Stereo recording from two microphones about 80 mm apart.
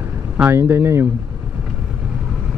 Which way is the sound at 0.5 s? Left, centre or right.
Right.